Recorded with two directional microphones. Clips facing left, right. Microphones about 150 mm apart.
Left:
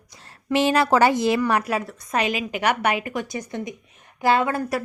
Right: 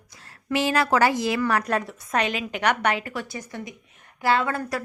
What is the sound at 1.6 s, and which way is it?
A woman's voice, 5° left (ahead or behind).